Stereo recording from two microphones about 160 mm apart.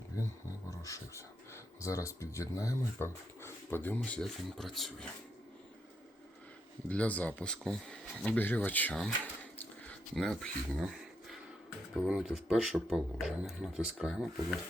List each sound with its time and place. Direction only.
0.7 s speech: 20° left (ahead or behind); by 5.0 s centre (ahead or behind)
6.8 s speech: 10° left (ahead or behind)